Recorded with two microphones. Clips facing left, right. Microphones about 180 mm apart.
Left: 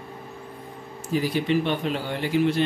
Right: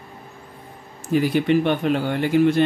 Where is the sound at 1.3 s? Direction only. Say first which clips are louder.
Right 4 dB; 55° right (ahead or behind).